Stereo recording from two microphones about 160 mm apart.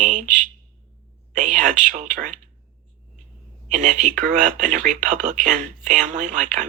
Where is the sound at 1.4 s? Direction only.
50° right (ahead or behind).